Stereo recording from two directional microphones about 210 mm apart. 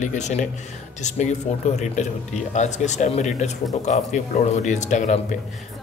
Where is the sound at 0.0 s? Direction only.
35° left (ahead or behind).